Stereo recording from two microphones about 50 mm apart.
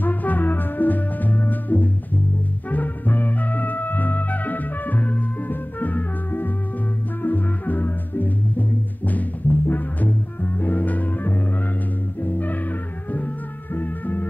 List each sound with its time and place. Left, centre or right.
0.0 s music: left
13.7 s music: left